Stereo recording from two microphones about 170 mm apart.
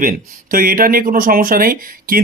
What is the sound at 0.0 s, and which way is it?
Speech, 55° right (ahead or behind).